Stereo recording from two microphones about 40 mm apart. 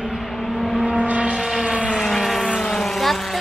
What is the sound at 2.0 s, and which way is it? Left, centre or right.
Vehicle, centre.